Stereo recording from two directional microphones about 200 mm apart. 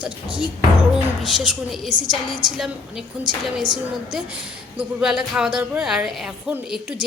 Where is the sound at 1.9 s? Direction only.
20° right (ahead or behind).